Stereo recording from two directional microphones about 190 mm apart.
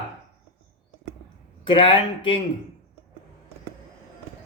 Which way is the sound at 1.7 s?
25° left (ahead or behind).